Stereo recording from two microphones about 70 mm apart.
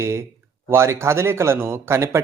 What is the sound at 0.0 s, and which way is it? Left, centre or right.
A man's voice, right.